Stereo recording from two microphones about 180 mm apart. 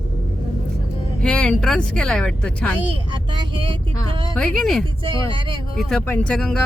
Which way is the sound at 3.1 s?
25° right (ahead or behind).